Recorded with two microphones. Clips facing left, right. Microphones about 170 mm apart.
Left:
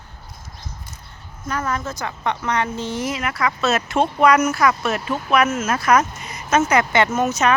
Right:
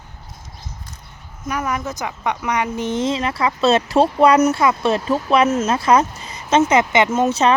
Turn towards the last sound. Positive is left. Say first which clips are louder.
# right 3 dB
turn(degrees=-30)  # may be behind; listen again after turning